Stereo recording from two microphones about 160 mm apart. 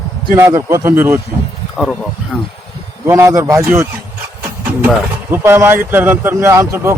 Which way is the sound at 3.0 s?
15° right (ahead or behind).